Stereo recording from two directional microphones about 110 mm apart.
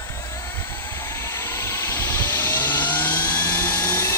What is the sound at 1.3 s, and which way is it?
Vehicle, 20° left (ahead or behind).